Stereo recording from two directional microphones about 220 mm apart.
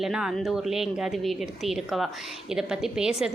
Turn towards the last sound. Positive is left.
turn(degrees=-5)  # may be behind; listen again after turning